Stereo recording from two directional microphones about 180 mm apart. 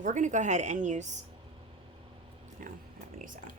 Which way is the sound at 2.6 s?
45° right (ahead or behind).